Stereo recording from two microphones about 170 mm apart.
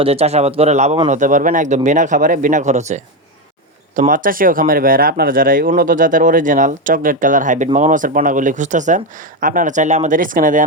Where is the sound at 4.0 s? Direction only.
55° right (ahead or behind).